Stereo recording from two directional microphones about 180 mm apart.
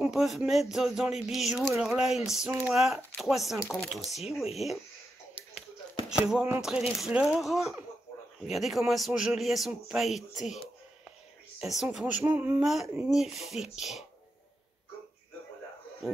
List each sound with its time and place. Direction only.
0.0 s a man's voice: centre (ahead or behind)
5.4 s music: 30° right (ahead or behind)
6.0 s a man's voice: 5° right (ahead or behind)
11.6 s a man's voice: centre (ahead or behind)
16.0 s speech: centre (ahead or behind)